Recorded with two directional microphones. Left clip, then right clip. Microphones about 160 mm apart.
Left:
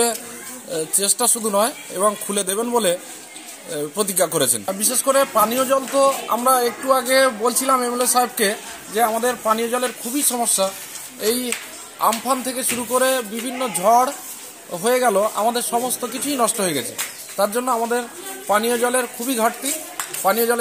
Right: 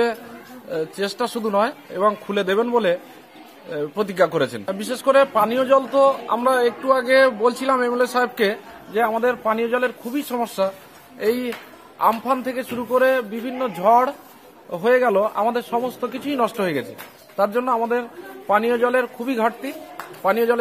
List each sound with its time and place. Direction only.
0.7 s speech: centre (ahead or behind)
11.1 s speech: 30° right (ahead or behind)
12.3 s speech: centre (ahead or behind)